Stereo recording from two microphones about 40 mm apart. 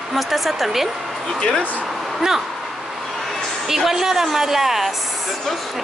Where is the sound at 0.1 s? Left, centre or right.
Centre.